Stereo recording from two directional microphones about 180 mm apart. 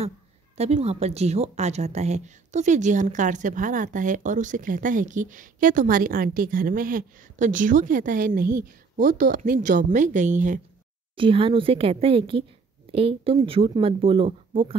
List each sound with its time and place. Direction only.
0.6 s speech: 35° right (ahead or behind)
11.1 s a woman's voice: 30° right (ahead or behind)